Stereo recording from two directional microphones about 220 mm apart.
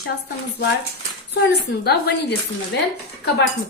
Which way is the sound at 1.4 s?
50° left (ahead or behind).